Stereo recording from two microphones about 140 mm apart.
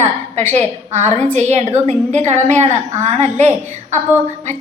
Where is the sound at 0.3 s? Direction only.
55° right (ahead or behind).